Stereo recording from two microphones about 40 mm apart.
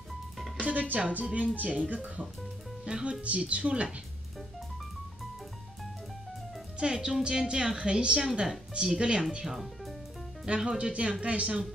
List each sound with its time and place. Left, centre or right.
0.6 s speech: right
2.8 s speech: right
6.8 s speech: centre
10.6 s speech: right